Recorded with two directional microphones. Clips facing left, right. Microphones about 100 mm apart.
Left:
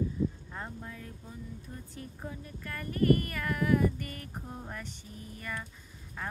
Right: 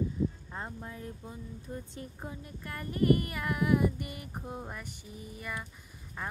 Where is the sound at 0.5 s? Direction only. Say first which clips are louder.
Right 1 dB; 20° right (ahead or behind).